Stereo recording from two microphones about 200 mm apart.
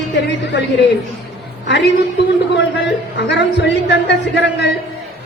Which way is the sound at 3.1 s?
60° left (ahead or behind).